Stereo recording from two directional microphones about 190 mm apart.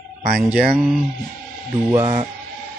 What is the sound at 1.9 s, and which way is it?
Speech, 10° right (ahead or behind).